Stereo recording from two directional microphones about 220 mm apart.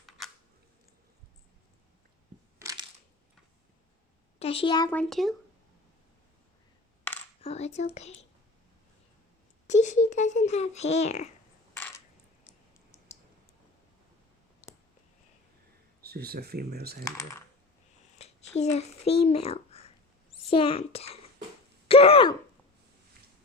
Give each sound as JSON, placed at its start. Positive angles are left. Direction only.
{"t": 4.4, "sound": "a woman's voice", "side_deg": 25}
{"t": 4.9, "sound": "speech", "side_deg": 5}
{"t": 7.4, "sound": "speech", "side_deg": 30}
{"t": 9.6, "sound": "a child's voice", "side_deg": 30}
{"t": 11.7, "sound": "coin", "side_deg": 10}
{"t": 16.0, "sound": "speech", "side_deg": -45}
{"t": 17.0, "sound": "speech", "side_deg": 15}
{"t": 18.2, "sound": "a child's voice", "side_deg": 30}
{"t": 21.8, "sound": "throat clearing", "side_deg": 25}